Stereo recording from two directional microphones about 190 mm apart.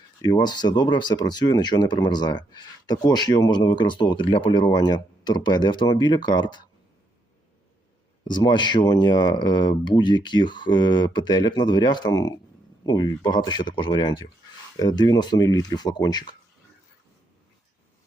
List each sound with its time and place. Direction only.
0.2 s speech: 20° left (ahead or behind)
8.2 s speech: 25° left (ahead or behind)